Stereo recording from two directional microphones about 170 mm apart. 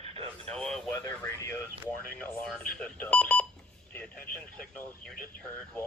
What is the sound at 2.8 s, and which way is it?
Alarm clock, 5° left (ahead or behind).